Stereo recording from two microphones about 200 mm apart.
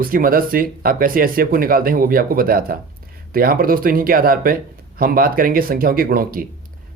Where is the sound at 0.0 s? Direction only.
45° right (ahead or behind).